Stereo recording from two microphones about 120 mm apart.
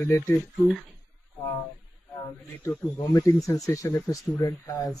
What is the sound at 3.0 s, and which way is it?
Speech, 25° left (ahead or behind).